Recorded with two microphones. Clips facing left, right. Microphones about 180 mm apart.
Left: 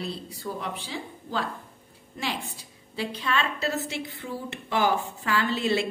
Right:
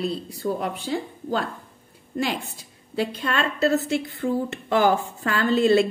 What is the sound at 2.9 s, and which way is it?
Speech, 50° right (ahead or behind).